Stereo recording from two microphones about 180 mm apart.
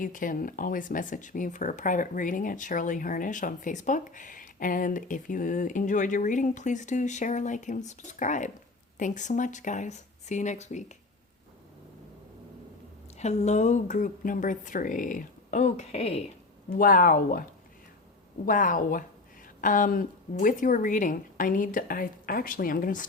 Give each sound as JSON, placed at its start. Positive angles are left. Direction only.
{"t": 0.0, "sound": "speech", "side_deg": 50}
{"t": 13.1, "sound": "speech", "side_deg": 40}
{"t": 16.7, "sound": "speech", "side_deg": 50}
{"t": 18.4, "sound": "speech", "side_deg": 50}